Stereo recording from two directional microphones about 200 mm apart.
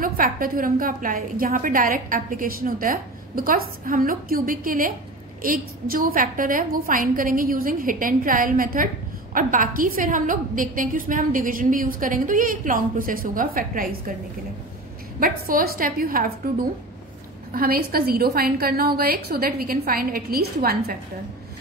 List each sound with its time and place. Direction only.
0.0 s a woman's voice: 45° right (ahead or behind)
15.1 s a woman's voice: 45° right (ahead or behind)